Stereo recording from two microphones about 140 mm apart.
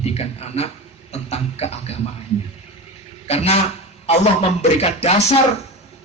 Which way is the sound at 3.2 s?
50° left (ahead or behind).